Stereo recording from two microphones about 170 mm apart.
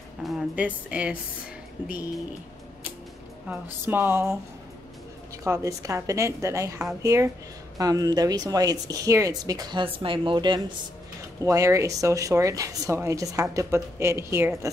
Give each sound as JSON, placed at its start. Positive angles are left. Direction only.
{"t": 0.2, "sound": "a woman's voice", "side_deg": -5}
{"t": 3.4, "sound": "a woman's voice", "side_deg": -10}
{"t": 5.4, "sound": "a woman's voice", "side_deg": -20}